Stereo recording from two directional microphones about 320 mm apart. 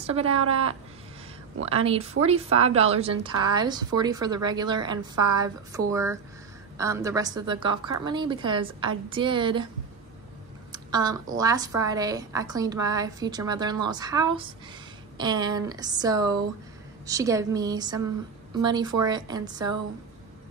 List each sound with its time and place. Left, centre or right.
1.7 s a woman's voice: centre
10.7 s a sound: centre
11.3 s a woman's voice: centre